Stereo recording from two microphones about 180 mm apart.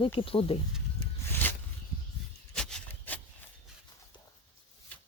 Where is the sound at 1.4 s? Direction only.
10° left (ahead or behind).